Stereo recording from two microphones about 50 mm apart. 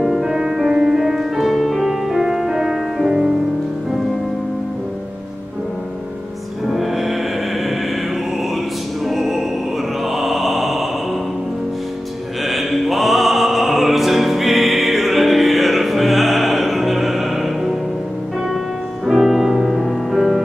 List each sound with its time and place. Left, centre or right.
0.0 s music: centre
1.4 s music: centre
6.7 s music: centre
9.0 s music: centre
10.0 s mantra: centre
12.4 s music: centre
19.0 s music: centre